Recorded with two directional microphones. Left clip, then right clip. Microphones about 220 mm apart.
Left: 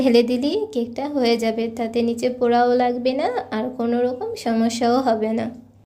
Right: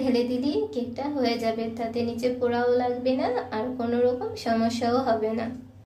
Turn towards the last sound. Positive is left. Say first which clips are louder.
# left 4 dB
turn(degrees=35)  # may be behind; listen again after turning